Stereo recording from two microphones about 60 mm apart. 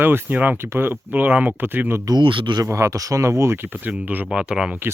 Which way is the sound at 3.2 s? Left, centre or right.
Right.